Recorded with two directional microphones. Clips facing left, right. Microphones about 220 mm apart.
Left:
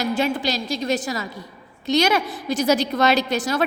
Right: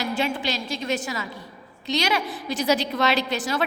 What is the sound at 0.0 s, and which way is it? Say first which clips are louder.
A woman's voice: left 4 dB; 40° left (ahead or behind).